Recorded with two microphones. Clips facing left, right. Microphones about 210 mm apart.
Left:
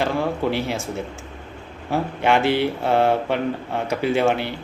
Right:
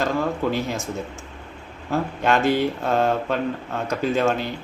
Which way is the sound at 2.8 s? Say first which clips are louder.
Left 2 dB; 10° left (ahead or behind).